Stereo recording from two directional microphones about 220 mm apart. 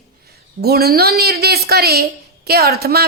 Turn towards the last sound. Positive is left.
turn(degrees=-45)  # may be behind; listen again after turning